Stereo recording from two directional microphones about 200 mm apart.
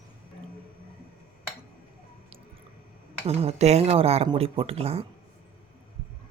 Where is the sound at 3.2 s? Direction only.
30° right (ahead or behind).